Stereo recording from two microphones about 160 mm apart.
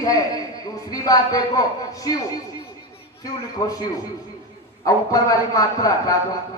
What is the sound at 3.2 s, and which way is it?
Speech, 20° left (ahead or behind).